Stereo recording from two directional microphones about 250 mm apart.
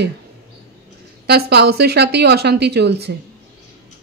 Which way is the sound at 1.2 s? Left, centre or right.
Right.